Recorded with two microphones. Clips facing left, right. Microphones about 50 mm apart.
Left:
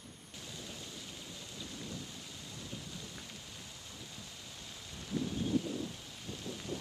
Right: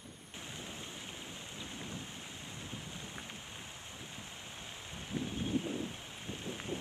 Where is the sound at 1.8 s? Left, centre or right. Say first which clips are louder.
Left 1 dB; right.